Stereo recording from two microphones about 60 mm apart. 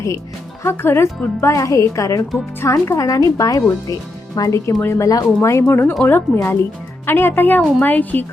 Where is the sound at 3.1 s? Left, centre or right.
Left.